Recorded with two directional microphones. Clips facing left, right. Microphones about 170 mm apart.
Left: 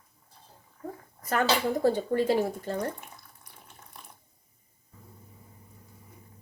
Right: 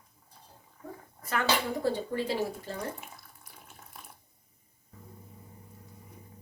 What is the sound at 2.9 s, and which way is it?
Water tap, 5° right (ahead or behind).